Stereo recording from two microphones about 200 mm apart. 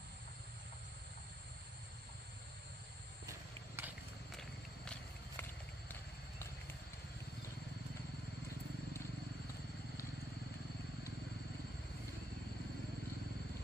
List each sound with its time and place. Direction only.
3.3 s clip-clop: 10° right (ahead or behind)